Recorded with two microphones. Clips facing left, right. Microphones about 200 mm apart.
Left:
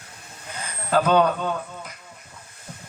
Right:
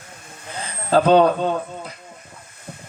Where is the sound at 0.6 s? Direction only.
30° right (ahead or behind).